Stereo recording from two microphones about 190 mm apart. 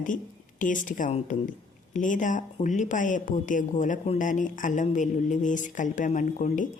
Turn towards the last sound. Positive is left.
turn(degrees=40)  # may be behind; listen again after turning